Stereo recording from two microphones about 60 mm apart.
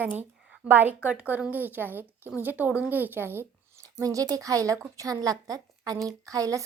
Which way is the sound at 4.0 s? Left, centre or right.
Right.